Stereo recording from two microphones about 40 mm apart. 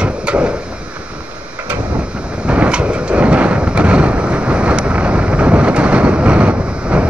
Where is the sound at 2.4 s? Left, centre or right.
Right.